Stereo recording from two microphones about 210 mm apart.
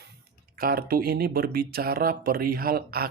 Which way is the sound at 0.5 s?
45° right (ahead or behind).